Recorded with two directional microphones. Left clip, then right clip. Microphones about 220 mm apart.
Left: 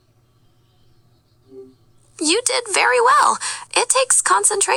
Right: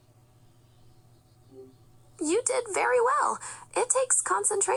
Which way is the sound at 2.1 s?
40° left (ahead or behind).